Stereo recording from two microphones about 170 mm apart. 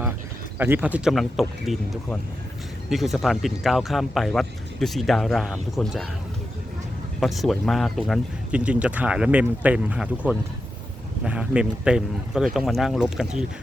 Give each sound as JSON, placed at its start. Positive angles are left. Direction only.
{"t": 0.6, "sound": "speech", "side_deg": -10}
{"t": 7.2, "sound": "speech", "side_deg": 0}